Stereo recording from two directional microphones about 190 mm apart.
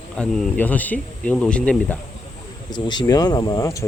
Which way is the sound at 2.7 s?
25° left (ahead or behind).